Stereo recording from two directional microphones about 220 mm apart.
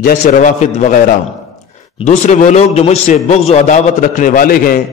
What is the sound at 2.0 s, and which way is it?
A man's voice, 35° left (ahead or behind).